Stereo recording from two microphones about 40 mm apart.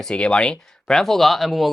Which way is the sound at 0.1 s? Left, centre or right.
Left.